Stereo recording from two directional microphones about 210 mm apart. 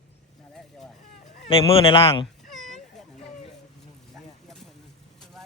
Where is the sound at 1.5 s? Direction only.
25° left (ahead or behind).